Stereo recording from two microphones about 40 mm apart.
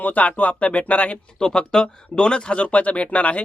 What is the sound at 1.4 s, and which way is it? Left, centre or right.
Speech, centre.